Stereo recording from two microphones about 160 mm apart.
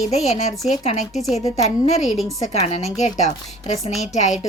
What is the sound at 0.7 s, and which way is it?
Speech, 45° left (ahead or behind).